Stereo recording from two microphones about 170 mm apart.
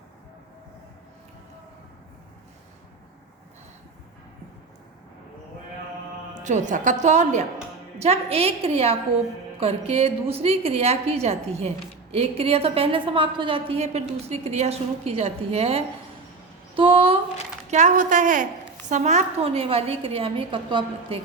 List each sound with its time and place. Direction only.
6.4 s a woman's voice: 45° right (ahead or behind)
17.7 s a woman's voice: 45° right (ahead or behind); by 21.2 s 30° right (ahead or behind)